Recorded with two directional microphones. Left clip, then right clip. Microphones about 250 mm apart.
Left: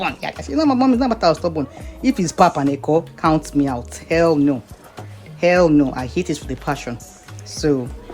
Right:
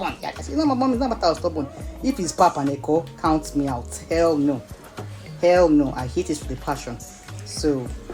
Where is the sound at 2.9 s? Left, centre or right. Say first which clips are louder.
Left 4 dB; left.